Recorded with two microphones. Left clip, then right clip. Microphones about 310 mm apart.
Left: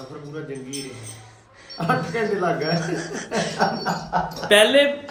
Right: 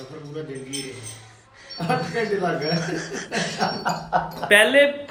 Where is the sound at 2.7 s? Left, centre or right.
Centre.